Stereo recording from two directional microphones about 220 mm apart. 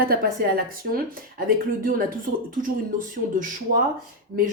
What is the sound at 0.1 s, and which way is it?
Speech, 40° right (ahead or behind).